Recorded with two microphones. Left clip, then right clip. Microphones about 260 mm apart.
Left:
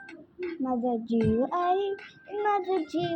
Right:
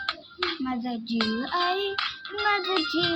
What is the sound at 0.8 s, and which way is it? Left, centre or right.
Child singing, centre.